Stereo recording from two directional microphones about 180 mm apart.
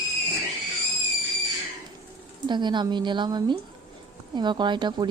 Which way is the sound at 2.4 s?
25° right (ahead or behind).